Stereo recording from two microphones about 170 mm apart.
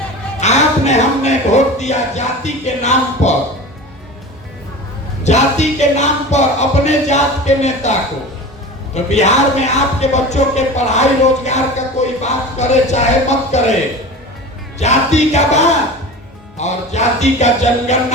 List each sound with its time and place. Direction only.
0.3 s speech: 40° left (ahead or behind)
5.2 s speech: 45° left (ahead or behind)
9.0 s speech: 40° left (ahead or behind)
14.8 s speech: 40° left (ahead or behind)